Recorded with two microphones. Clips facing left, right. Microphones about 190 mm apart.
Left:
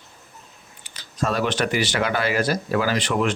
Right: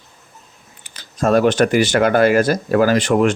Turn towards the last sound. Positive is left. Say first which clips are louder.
# right 7 dB
turn(degrees=-45)  # may be behind; listen again after turning